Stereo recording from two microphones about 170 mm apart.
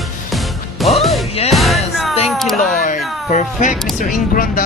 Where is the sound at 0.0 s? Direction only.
Centre (ahead or behind).